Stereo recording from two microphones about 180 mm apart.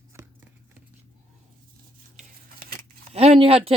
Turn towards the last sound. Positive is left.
turn(degrees=-30)  # may be behind; listen again after turning